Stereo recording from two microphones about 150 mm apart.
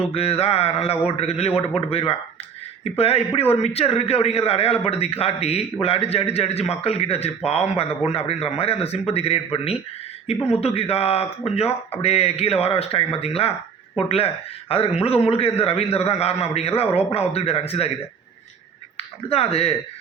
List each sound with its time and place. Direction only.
0.1 s a man's voice: 40° left (ahead or behind)
18.9 s speech: 40° left (ahead or behind)